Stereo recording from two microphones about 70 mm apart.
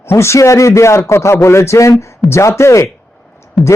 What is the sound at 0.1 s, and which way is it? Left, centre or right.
Speech, left.